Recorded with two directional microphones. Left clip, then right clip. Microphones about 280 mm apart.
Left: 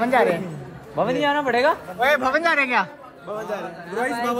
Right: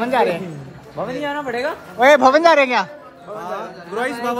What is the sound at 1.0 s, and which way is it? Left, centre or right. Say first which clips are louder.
Speech: left 3 dB; left.